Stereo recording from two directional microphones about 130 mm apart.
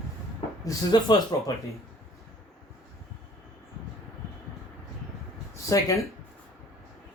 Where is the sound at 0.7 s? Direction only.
30° left (ahead or behind).